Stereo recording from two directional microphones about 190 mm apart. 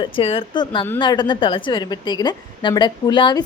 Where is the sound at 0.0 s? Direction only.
30° left (ahead or behind).